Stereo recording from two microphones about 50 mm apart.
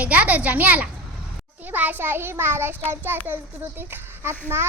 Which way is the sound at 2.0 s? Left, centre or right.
Right.